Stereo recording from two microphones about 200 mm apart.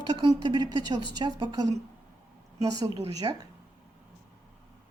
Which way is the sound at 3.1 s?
20° right (ahead or behind).